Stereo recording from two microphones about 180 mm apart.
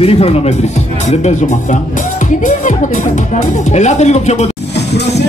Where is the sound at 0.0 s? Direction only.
35° left (ahead or behind).